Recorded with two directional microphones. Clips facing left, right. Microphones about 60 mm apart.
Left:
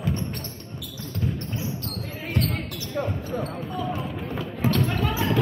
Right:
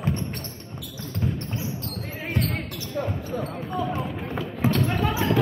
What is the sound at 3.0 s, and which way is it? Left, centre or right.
Speech, left.